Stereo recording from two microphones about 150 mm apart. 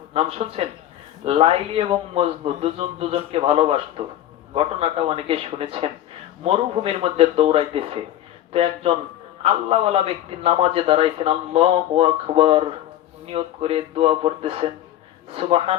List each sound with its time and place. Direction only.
0.1 s a man's voice: 40° right (ahead or behind)